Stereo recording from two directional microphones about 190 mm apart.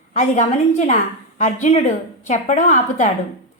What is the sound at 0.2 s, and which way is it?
A woman's voice, 40° left (ahead or behind).